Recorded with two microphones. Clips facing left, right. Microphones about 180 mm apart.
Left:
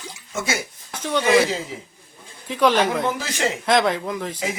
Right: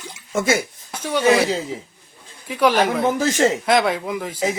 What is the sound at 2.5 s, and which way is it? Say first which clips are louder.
Speech: right 1 dB; 10° right (ahead or behind).